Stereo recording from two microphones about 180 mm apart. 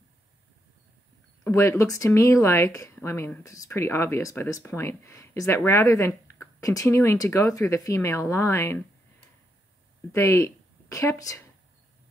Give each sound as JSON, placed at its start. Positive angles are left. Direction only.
{"t": 1.4, "sound": "speech", "side_deg": 15}
{"t": 10.1, "sound": "speech", "side_deg": 15}